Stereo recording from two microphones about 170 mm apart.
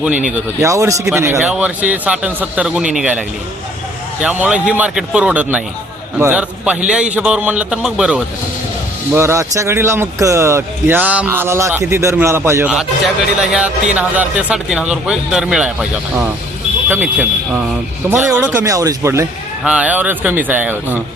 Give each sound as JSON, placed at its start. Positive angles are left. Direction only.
{"t": 0.0, "sound": "speech", "side_deg": -5}
{"t": 0.6, "sound": "speech", "side_deg": -15}
{"t": 9.1, "sound": "speech", "side_deg": -15}
{"t": 13.4, "sound": "speech", "side_deg": -5}
{"t": 18.6, "sound": "speech", "side_deg": -20}